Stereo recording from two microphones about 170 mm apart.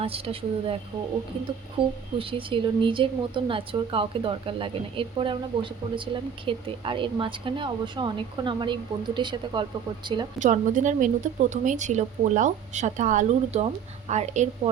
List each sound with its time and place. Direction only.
0.0 s a woman's voice: 35° right (ahead or behind)
1.8 s a woman's voice: 35° right (ahead or behind)
10.4 s a woman's voice: 50° right (ahead or behind)